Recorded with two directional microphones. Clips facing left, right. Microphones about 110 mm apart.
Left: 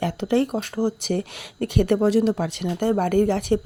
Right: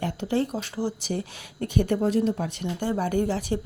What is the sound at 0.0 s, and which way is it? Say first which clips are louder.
Speech: left 5 dB; 65° left (ahead or behind).